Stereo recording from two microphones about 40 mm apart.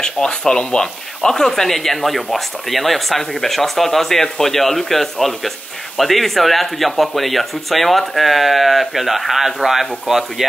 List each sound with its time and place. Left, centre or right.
0.0 s speech: centre